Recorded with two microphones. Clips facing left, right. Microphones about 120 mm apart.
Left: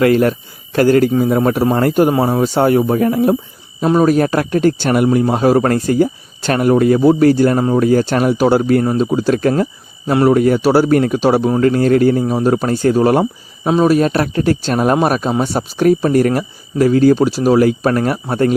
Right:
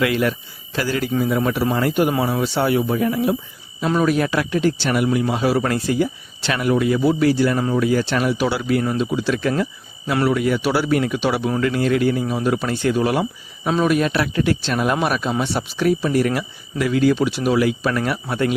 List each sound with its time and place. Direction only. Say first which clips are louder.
0.0 s speech: left 7 dB; 45° left (ahead or behind)